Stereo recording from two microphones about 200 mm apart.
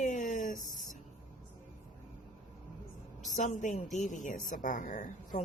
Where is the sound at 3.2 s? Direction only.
40° left (ahead or behind).